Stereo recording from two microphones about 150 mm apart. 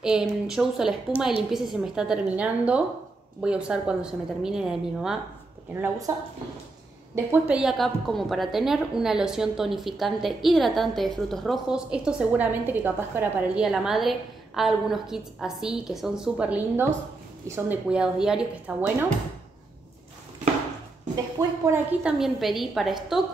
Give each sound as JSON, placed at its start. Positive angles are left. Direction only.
{"t": 0.0, "sound": "a woman's voice", "side_deg": -5}
{"t": 6.1, "sound": "a woman's voice", "side_deg": -20}
{"t": 13.7, "sound": "a woman's voice", "side_deg": -5}
{"t": 21.7, "sound": "a woman's voice", "side_deg": -5}